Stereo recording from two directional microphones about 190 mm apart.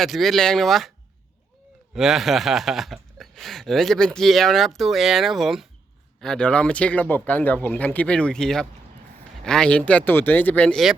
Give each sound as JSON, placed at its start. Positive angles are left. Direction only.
{"t": 0.0, "sound": "speech", "side_deg": 0}